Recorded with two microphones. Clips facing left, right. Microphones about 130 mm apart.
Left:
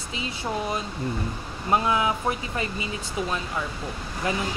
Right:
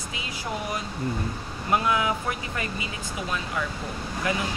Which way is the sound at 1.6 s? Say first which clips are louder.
Left 1 dB; 25° left (ahead or behind).